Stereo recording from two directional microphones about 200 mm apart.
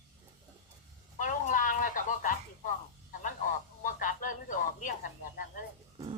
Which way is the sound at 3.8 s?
40° left (ahead or behind).